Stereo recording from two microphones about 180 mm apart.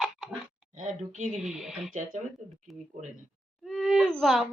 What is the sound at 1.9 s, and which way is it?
Speech, 45° right (ahead or behind).